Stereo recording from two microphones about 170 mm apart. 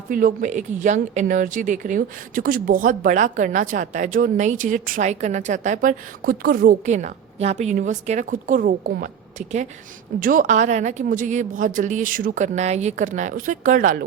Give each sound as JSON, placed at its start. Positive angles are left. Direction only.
{"t": 0.1, "sound": "speech", "side_deg": -55}
{"t": 10.2, "sound": "speech", "side_deg": -55}